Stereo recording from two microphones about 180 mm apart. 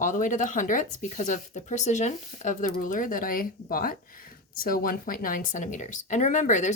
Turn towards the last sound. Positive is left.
turn(degrees=45)  # may be behind; listen again after turning